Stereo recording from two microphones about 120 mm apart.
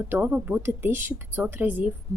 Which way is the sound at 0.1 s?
15° right (ahead or behind).